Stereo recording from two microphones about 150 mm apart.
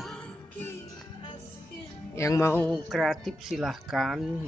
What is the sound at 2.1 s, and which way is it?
Music, 20° left (ahead or behind).